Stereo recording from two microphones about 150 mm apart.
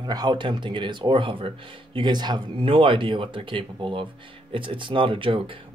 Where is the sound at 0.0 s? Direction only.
30° right (ahead or behind).